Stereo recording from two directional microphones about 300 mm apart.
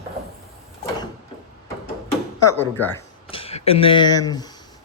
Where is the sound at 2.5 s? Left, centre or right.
Centre.